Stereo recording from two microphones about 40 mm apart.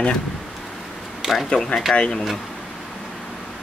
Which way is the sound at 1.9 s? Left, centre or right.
Left.